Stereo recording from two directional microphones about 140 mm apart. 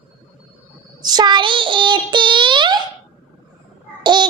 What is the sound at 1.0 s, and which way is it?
Child singing, 30° right (ahead or behind).